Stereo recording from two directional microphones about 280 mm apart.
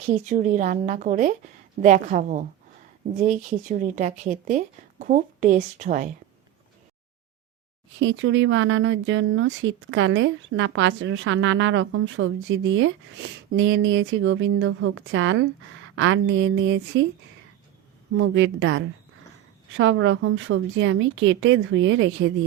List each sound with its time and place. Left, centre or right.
0.0 s speech: right
7.9 s speech: right
18.2 s speech: right